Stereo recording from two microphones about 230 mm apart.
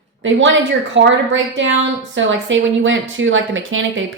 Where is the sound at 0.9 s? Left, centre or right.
Right.